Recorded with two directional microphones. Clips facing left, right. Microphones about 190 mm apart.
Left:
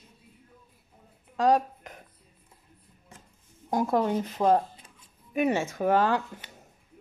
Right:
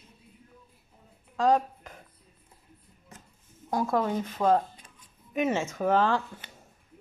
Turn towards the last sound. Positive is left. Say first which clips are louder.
# left 1 dB
turn(degrees=15)  # may be behind; listen again after turning